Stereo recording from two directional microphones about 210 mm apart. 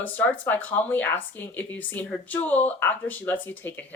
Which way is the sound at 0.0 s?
10° left (ahead or behind).